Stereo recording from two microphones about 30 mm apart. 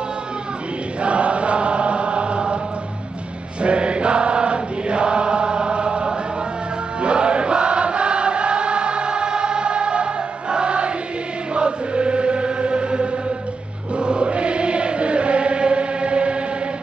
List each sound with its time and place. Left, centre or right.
1.0 s chant: right
3.6 s chant: right
7.0 s choir: right
11.5 s music: right
13.9 s chant: right